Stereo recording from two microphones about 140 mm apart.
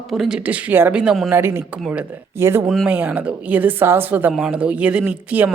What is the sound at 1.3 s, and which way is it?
A woman's voice, 15° right (ahead or behind).